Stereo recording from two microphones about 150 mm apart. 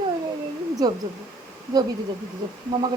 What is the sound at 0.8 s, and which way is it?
Speech, 25° right (ahead or behind).